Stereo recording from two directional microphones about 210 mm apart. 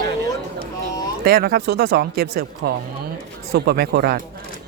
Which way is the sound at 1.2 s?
45° right (ahead or behind).